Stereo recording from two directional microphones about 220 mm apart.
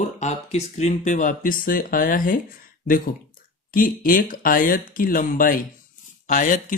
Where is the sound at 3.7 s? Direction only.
40° left (ahead or behind).